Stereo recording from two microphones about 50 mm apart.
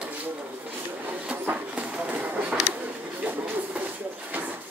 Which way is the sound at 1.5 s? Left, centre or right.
Right.